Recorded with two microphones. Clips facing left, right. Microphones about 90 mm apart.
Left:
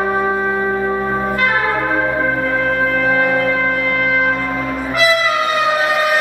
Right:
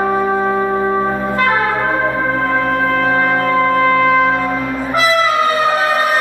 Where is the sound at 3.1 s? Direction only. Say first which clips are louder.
Right 1 dB; 35° right (ahead or behind).